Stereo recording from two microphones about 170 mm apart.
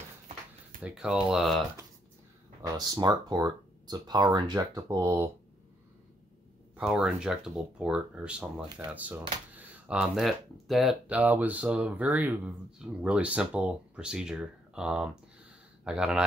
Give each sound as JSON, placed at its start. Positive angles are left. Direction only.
{"t": 0.8, "sound": "speech", "side_deg": -5}
{"t": 2.6, "sound": "speech", "side_deg": -25}
{"t": 6.8, "sound": "speech", "side_deg": -5}